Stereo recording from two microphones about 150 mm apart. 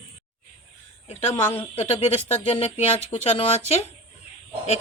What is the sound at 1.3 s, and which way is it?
Speech, 15° left (ahead or behind).